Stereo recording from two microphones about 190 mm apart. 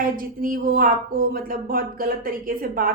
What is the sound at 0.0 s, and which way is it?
A woman's voice, 45° right (ahead or behind).